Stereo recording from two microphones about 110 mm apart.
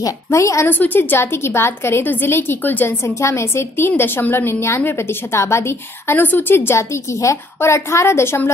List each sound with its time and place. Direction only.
0.0 s a woman's voice: 25° left (ahead or behind)